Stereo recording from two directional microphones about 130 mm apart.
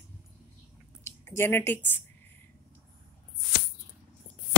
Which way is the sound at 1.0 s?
20° left (ahead or behind).